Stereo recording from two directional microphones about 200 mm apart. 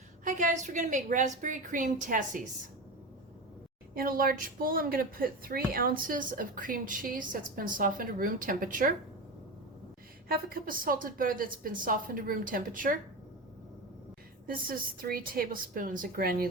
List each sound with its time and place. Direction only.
0.3 s a woman's voice: 35° right (ahead or behind)
3.9 s a woman's voice: 45° right (ahead or behind)
10.2 s a woman's voice: 45° right (ahead or behind)
14.4 s a woman's voice: 45° right (ahead or behind)